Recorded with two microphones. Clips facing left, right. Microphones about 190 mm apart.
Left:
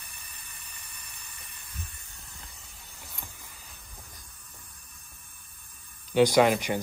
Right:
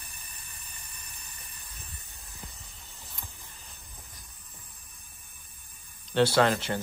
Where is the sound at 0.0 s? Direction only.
35° right (ahead or behind).